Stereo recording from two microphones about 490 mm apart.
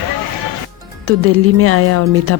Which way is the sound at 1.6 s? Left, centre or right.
Right.